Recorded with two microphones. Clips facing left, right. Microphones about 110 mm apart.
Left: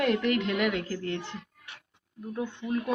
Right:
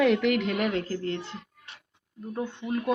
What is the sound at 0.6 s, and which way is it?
Speech, 35° right (ahead or behind).